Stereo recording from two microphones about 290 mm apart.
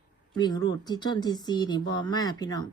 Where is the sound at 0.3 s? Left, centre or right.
Centre.